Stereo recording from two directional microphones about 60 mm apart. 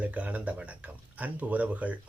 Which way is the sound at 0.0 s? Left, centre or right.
Right.